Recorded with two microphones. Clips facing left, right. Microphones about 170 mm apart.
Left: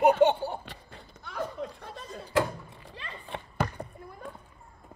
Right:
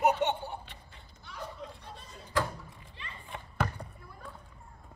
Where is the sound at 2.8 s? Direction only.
90° left.